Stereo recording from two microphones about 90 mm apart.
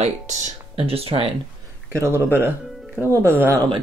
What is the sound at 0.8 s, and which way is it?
Speech, 90° right.